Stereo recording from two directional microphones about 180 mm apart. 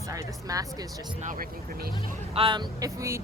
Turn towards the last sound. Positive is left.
turn(degrees=-15)  # may be behind; listen again after turning